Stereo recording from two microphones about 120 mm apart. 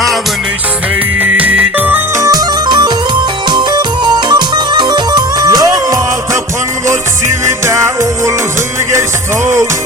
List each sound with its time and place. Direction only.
1.2 s music: 15° right (ahead or behind)
2.2 s music: 30° right (ahead or behind)
7.4 s music: 25° right (ahead or behind)